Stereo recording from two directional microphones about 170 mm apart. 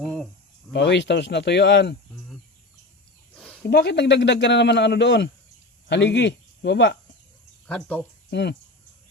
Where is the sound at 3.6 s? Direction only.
75° left (ahead or behind); by 7.0 s 90° left.